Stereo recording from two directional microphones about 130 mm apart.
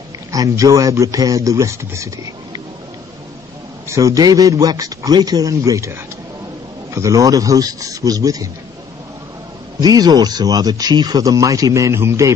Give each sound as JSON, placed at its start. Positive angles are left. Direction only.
{"t": 0.3, "sound": "speech", "side_deg": -25}
{"t": 3.9, "sound": "speech", "side_deg": -25}
{"t": 9.8, "sound": "speech", "side_deg": -30}